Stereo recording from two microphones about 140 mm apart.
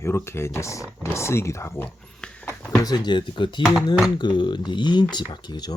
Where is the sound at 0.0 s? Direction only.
20° left (ahead or behind).